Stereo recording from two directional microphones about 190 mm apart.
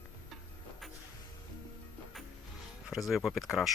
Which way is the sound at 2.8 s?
Centre (ahead or behind).